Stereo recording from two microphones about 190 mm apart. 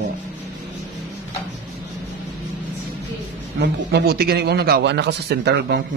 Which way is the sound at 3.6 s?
55° right (ahead or behind).